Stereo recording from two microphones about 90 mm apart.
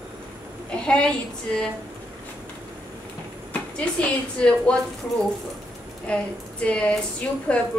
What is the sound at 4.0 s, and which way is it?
Speech, 10° left (ahead or behind).